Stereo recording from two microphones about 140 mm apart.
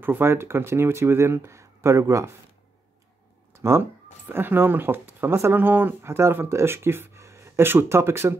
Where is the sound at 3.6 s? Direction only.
15° right (ahead or behind).